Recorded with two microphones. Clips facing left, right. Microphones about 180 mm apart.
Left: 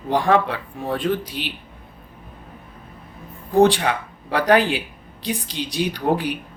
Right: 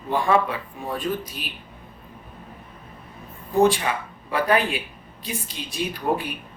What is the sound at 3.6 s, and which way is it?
Speech, 75° left (ahead or behind).